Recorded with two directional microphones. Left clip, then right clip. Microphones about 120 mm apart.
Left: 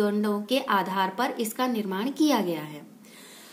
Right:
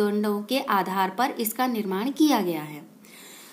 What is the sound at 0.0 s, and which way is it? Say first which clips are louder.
A woman's voice: right 1 dB; 30° right (ahead or behind).